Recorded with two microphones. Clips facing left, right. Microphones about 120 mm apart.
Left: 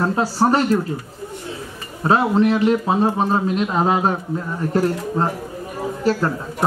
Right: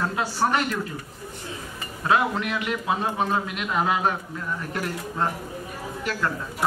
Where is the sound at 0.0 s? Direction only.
35° left (ahead or behind).